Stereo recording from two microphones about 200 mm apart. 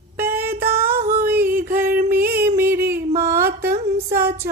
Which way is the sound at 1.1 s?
50° right (ahead or behind).